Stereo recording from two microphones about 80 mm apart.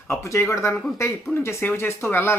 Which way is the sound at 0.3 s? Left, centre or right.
Left.